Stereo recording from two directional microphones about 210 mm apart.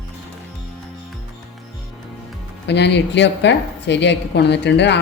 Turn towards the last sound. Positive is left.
turn(degrees=55)  # may be behind; listen again after turning